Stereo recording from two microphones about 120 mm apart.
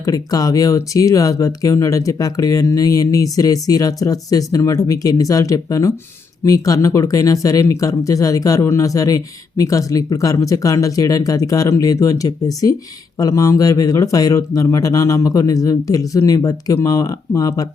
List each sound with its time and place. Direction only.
0.0 s speech: 30° left (ahead or behind)